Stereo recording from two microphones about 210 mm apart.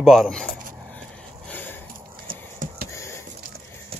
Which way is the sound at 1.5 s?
10° left (ahead or behind).